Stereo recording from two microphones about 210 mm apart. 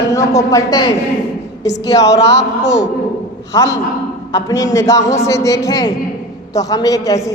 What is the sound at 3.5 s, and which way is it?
A man's voice, 15° left (ahead or behind).